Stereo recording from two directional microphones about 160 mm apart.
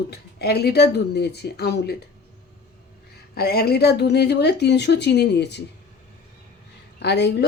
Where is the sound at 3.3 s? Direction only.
80° left.